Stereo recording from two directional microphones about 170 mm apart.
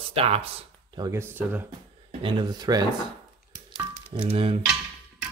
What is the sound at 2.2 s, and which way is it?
Speech, 30° right (ahead or behind).